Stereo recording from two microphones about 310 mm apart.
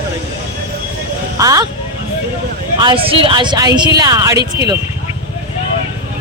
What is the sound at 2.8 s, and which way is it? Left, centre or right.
A man's voice, centre.